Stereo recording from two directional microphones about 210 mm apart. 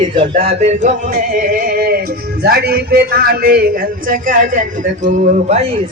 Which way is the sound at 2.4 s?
50° right (ahead or behind).